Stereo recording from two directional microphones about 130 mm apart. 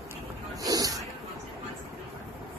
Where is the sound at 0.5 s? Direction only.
30° right (ahead or behind).